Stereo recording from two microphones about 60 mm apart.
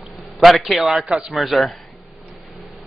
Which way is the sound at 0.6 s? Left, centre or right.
Centre.